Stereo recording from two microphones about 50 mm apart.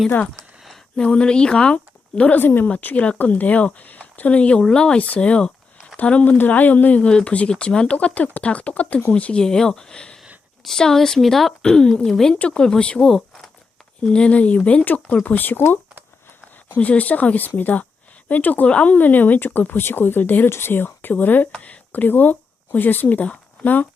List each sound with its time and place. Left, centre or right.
0.9 s a woman's voice: left
2.4 s speech: left
2.8 s speech: left
7.0 s speech: centre
7.9 s speech: left
9.4 s speech: centre
12.3 s speech: centre
14.1 s speech: left
16.7 s speech: left
20.5 s speech: left
21.6 s a sound: left
22.0 s speech: left